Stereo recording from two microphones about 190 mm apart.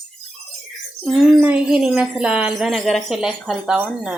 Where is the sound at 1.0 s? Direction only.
5° right (ahead or behind).